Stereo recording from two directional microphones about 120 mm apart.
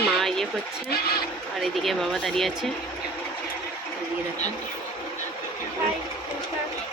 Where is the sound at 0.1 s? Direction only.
5° left (ahead or behind).